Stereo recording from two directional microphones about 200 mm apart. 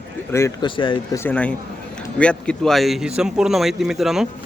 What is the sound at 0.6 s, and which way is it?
Speech, 25° left (ahead or behind).